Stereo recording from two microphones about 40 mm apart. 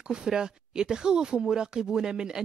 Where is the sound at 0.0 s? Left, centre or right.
Centre.